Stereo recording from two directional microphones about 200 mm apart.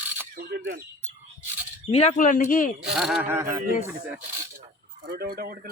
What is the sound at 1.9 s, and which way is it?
Speech, 30° left (ahead or behind).